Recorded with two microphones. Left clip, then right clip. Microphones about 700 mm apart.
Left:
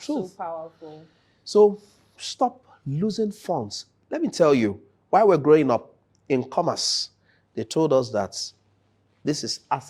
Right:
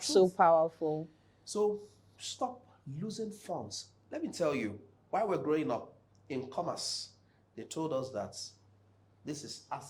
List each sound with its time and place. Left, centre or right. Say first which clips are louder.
0.3 s a woman's voice: right 7 dB; right
1.5 s speech: left 15 dB; left